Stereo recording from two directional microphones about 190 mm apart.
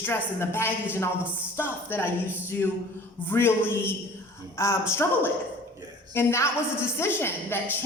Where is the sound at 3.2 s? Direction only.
10° left (ahead or behind).